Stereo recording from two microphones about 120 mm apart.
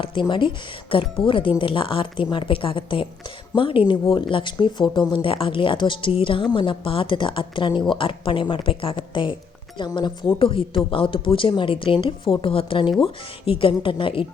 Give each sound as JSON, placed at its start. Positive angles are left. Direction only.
{"t": 0.0, "sound": "speech", "side_deg": 40}